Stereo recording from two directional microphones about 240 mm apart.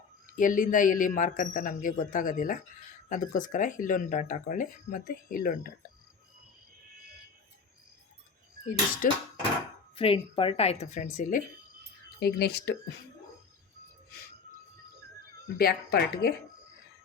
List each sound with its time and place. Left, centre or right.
0.3 s speech: left
9.0 s speech: left
9.9 s speech: left
15.5 s speech: left